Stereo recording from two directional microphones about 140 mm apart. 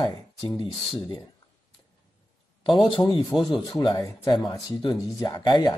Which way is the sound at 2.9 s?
35° left (ahead or behind).